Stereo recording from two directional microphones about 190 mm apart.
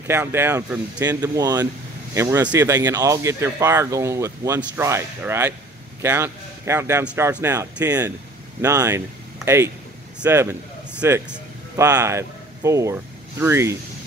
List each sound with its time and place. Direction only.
0.0 s speech: 15° right (ahead or behind)